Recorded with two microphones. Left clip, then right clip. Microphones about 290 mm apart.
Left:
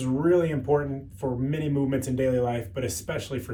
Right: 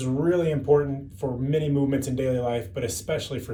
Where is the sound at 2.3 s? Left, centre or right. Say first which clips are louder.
Left 1 dB; centre.